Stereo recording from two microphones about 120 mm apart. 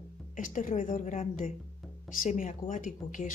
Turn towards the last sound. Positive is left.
turn(degrees=90)